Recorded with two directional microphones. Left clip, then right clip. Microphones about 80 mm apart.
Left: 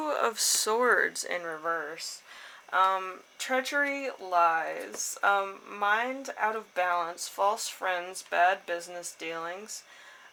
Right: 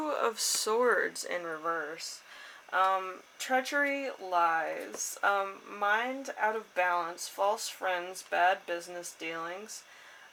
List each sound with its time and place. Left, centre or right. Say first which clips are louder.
0.0 s speech: left 3 dB; left